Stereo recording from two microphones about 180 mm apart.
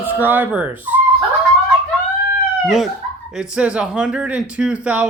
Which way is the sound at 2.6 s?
Centre (ahead or behind).